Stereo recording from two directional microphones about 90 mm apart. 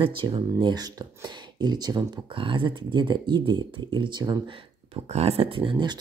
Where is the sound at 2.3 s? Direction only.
70° right (ahead or behind).